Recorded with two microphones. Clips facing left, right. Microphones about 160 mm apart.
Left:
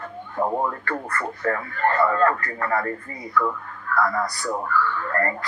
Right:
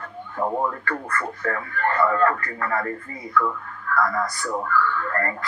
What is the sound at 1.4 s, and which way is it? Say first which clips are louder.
Speech: left 3 dB; 20° left (ahead or behind).